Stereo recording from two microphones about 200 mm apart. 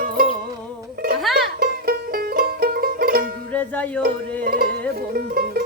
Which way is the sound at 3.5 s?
10° left (ahead or behind).